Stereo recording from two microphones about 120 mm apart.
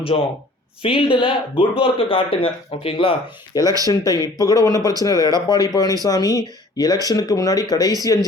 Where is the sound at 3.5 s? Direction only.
30° left (ahead or behind).